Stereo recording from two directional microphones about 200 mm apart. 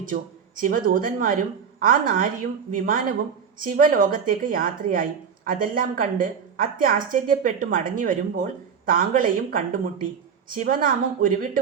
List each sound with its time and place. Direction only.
0.0 s a woman's voice: 45° right (ahead or behind)